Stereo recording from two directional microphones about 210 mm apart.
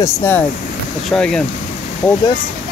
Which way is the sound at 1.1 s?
Centre (ahead or behind).